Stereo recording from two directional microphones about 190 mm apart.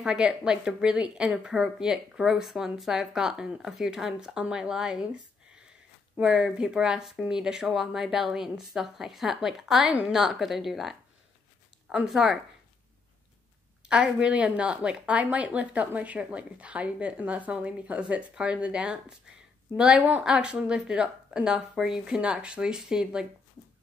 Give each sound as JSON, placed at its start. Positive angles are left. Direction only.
{"t": 0.0, "sound": "a woman's voice", "side_deg": -5}
{"t": 13.8, "sound": "a woman's voice", "side_deg": -5}